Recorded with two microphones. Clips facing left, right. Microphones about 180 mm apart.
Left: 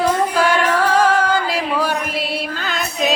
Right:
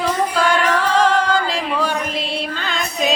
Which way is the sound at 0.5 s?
10° left (ahead or behind).